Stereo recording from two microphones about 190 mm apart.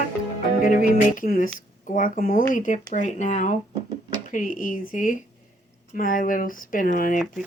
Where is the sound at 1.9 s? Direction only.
45° left (ahead or behind).